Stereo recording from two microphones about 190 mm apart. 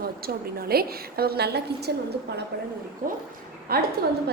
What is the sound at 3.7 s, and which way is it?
Speech, 55° right (ahead or behind).